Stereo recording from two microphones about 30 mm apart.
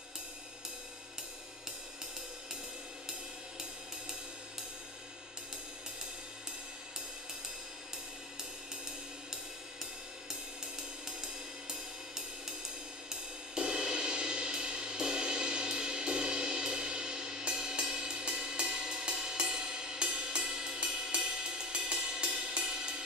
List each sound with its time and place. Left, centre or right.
13.1 s music: right